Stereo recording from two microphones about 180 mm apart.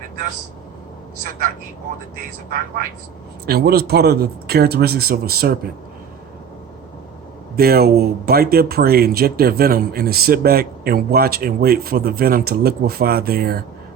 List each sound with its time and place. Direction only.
3.4 s speech: 60° right (ahead or behind)
7.5 s speech: 60° right (ahead or behind)